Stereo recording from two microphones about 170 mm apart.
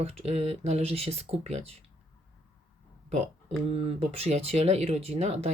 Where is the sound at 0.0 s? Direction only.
40° right (ahead or behind).